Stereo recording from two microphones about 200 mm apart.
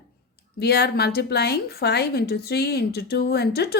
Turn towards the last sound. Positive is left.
turn(degrees=55)  # may be behind; listen again after turning